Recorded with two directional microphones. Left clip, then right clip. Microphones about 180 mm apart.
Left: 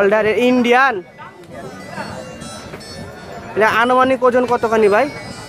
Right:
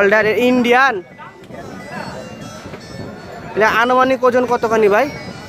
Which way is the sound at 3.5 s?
Centre (ahead or behind).